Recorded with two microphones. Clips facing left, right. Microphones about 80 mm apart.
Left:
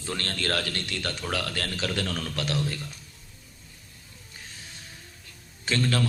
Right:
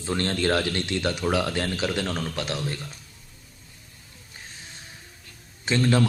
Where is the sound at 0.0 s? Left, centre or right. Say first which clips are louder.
Right 6 dB; right.